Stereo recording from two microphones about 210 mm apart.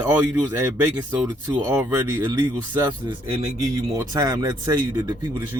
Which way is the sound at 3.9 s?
15° right (ahead or behind).